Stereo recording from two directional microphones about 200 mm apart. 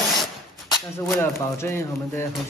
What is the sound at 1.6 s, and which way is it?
Speech, 10° left (ahead or behind).